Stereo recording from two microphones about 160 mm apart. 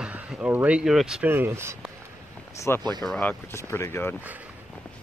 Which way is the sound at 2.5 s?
15° left (ahead or behind).